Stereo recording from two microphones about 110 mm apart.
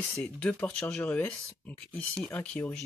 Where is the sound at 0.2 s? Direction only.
10° left (ahead or behind).